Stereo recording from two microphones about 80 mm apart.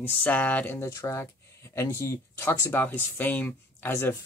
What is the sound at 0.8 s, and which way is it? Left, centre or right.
Speech, left.